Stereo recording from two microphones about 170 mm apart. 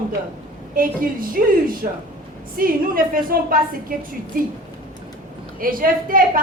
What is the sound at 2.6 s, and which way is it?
A woman's voice, 55° right (ahead or behind).